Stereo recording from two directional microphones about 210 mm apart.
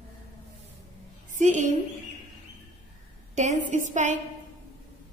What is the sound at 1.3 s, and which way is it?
Speech, 35° right (ahead or behind).